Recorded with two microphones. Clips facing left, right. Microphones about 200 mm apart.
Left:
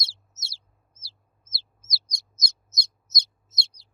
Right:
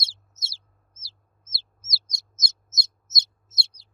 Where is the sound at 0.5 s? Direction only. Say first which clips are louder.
Right 1 dB; 25° right (ahead or behind).